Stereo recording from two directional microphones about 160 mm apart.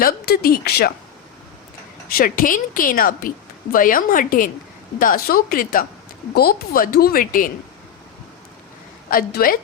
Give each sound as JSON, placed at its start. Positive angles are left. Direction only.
{"t": 0.0, "sound": "speech", "side_deg": 70}
{"t": 2.0, "sound": "a woman's voice", "side_deg": 65}
{"t": 9.0, "sound": "a woman's voice", "side_deg": 65}